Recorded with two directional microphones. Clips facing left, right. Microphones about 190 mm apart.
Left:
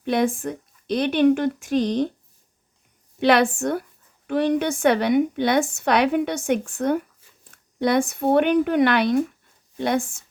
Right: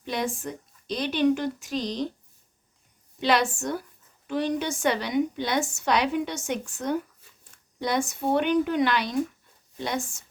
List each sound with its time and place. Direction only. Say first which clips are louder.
0.0 s a woman's voice: left 8 dB; 55° left (ahead or behind)
3.2 s a woman's voice: left 6 dB; 60° left (ahead or behind)